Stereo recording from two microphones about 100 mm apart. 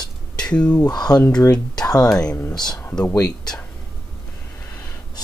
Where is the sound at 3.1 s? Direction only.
40° left (ahead or behind).